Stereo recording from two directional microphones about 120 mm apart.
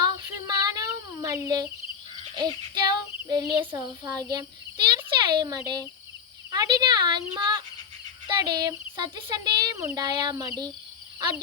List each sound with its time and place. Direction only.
0.0 s child singing: 35° right (ahead or behind)
2.3 s a child's voice: 40° right (ahead or behind)